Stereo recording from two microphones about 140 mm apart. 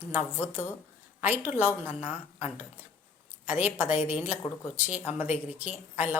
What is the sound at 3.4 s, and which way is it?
Speech, 10° right (ahead or behind).